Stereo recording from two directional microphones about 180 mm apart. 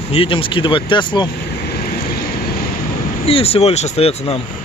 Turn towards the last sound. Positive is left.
turn(degrees=35)  # may be behind; listen again after turning